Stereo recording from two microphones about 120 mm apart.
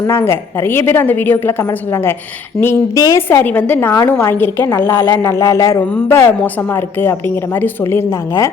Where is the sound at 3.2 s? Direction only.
15° left (ahead or behind).